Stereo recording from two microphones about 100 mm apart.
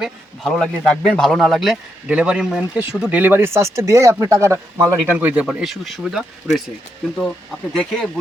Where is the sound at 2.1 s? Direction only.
10° right (ahead or behind).